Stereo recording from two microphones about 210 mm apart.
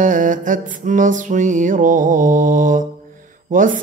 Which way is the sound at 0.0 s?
40° right (ahead or behind).